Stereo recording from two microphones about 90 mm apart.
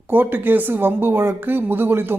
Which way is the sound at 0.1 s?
20° right (ahead or behind).